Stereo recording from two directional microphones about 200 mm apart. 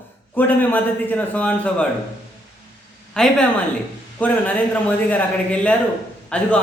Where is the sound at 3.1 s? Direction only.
5° left (ahead or behind).